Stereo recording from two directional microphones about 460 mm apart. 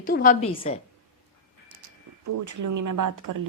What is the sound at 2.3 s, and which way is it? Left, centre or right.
Speech, right.